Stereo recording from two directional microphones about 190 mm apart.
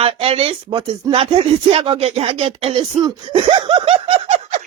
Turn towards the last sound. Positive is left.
turn(degrees=-35)  # may be behind; listen again after turning